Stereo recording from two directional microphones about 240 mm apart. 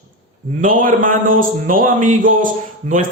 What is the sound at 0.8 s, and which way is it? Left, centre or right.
A man's voice, right.